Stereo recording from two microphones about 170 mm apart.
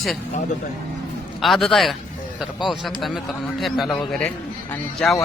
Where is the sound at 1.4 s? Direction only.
Centre (ahead or behind).